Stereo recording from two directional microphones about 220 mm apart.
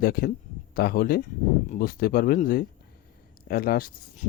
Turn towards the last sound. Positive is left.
turn(degrees=45)  # may be behind; listen again after turning